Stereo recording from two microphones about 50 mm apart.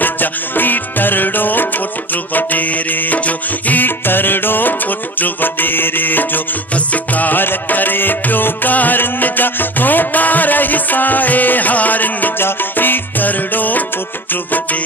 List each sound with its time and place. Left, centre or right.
0.0 s music: left